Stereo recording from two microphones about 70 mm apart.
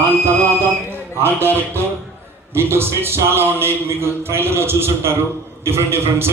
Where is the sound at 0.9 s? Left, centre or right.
Right.